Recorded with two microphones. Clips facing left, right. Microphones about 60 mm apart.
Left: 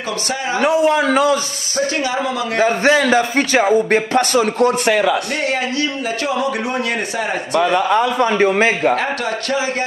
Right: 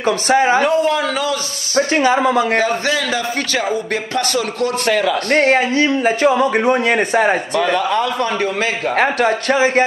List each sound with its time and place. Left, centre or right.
0.0 s a man's voice: right
0.7 s a man's voice: centre
1.8 s a man's voice: right
2.6 s a man's voice: left
4.8 s a man's voice: centre
5.3 s a man's voice: right
5.6 s a man's voice: right
7.7 s a man's voice: centre
8.4 s a man's voice: left
8.9 s a man's voice: right